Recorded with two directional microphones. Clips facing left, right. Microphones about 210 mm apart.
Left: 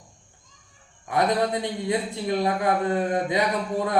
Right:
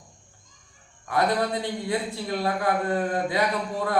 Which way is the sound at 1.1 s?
20° left (ahead or behind).